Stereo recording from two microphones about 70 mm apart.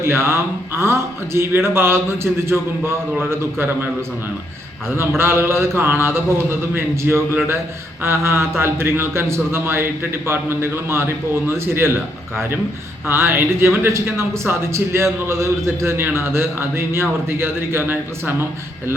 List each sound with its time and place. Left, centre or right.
0.0 s speech: right
4.9 s speech: right